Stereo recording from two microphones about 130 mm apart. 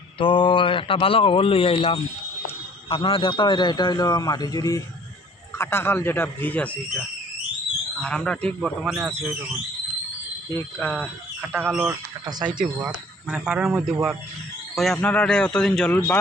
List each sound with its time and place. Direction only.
0.2 s a man's voice: 40° left (ahead or behind); by 9.0 s centre (ahead or behind)
10.5 s speech: 15° left (ahead or behind)
11.7 s speech: 5° right (ahead or behind)
12.2 s speech: 35° right (ahead or behind)
12.8 s speech: 10° right (ahead or behind)
15.0 s speech: 10° left (ahead or behind)